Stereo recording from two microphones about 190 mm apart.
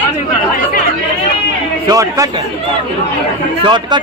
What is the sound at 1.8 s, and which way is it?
Speech, 15° right (ahead or behind).